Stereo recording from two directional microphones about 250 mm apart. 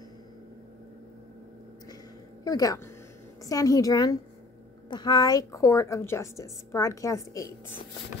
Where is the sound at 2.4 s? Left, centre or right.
Centre.